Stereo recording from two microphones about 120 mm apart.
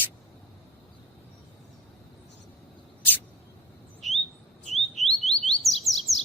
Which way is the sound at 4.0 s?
Centre (ahead or behind).